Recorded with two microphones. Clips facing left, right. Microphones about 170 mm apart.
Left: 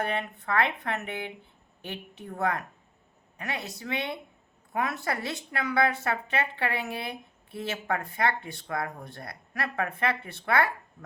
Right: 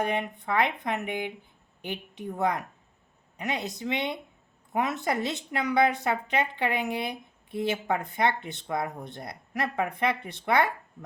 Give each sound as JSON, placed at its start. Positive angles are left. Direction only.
{"t": 0.0, "sound": "speech", "side_deg": -15}